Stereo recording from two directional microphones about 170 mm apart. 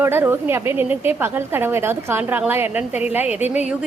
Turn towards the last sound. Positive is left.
turn(degrees=-10)  # may be behind; listen again after turning